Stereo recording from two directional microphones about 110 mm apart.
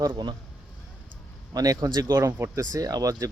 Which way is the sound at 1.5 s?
35° right (ahead or behind).